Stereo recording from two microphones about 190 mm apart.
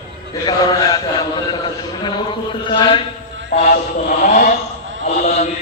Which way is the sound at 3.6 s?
45° left (ahead or behind).